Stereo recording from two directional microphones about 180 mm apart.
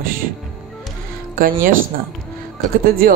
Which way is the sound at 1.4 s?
50° right (ahead or behind).